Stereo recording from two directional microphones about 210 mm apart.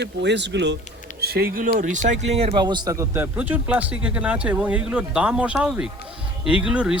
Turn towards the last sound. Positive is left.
turn(degrees=-5)  # may be behind; listen again after turning